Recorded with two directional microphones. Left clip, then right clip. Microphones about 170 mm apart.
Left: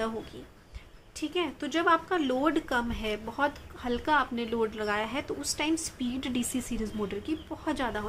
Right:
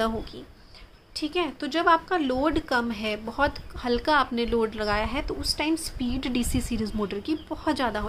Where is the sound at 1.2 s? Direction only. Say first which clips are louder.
Right 3 dB; 25° right (ahead or behind).